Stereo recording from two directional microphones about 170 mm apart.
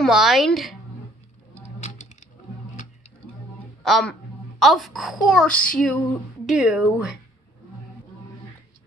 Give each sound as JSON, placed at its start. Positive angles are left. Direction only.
{"t": 0.0, "sound": "a woman's voice", "side_deg": 0}
{"t": 1.5, "sound": "a sound", "side_deg": 45}
{"t": 3.8, "sound": "a woman's voice", "side_deg": 0}
{"t": 6.4, "sound": "a woman's voice", "side_deg": -5}